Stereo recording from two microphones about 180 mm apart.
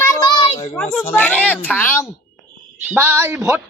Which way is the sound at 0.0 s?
20° left (ahead or behind).